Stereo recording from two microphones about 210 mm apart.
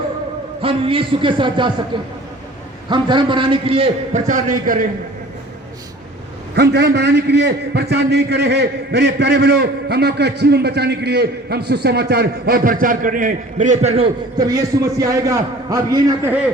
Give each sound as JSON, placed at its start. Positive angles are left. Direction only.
{"t": 0.6, "sound": "a man's voice", "side_deg": -25}
{"t": 2.9, "sound": "a man's voice", "side_deg": -20}
{"t": 6.6, "sound": "a man's voice", "side_deg": -50}